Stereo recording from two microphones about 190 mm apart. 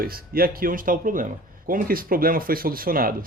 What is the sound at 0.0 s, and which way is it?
Speech, 50° right (ahead or behind).